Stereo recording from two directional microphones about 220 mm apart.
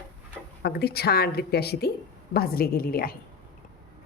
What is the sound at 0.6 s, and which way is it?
A woman's voice, 45° left (ahead or behind).